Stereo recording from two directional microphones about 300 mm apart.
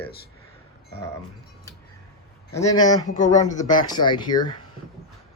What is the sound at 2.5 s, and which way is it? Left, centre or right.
Speech, centre.